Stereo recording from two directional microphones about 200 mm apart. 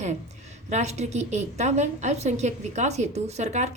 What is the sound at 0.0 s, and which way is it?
A woman's voice, 35° right (ahead or behind).